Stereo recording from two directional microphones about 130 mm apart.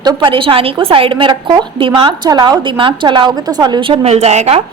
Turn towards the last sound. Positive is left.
turn(degrees=-55)  # may be behind; listen again after turning